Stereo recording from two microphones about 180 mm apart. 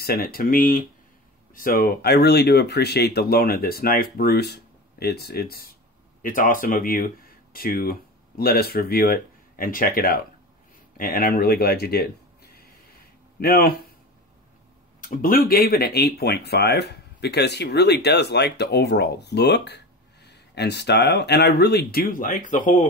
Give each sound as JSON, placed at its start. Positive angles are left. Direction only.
{"t": 0.0, "sound": "speech", "side_deg": 55}
{"t": 13.4, "sound": "speech", "side_deg": 55}
{"t": 15.0, "sound": "speech", "side_deg": 50}